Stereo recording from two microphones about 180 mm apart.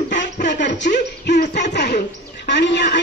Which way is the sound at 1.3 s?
70° left (ahead or behind).